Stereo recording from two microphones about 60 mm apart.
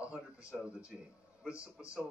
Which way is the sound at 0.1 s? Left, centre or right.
Centre.